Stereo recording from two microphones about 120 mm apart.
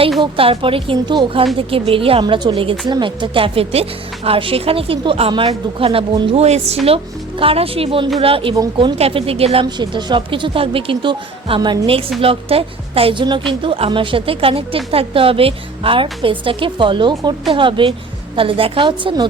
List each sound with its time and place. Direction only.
0.2 s speech: 50° right (ahead or behind)
2.2 s speech: 35° right (ahead or behind)
6.4 s a woman's voice: 65° right (ahead or behind)
6.8 s speech: 50° right (ahead or behind)
9.6 s speech: 40° right (ahead or behind)